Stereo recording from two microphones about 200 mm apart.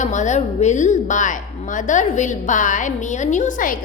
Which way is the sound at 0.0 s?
35° left (ahead or behind).